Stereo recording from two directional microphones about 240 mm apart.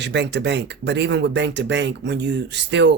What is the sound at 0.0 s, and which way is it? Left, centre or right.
Speech, right.